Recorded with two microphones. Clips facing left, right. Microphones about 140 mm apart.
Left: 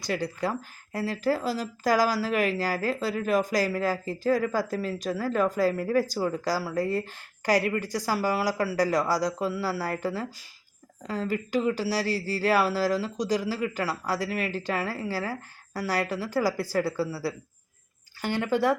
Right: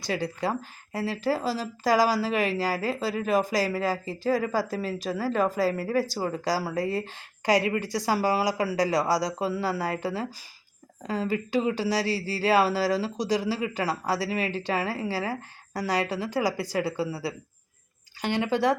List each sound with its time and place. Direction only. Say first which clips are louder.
0.0 s speech: even; 20° right (ahead or behind)
0.9 s speech: even; centre (ahead or behind)
6.7 s speech: left 1 dB; 20° right (ahead or behind)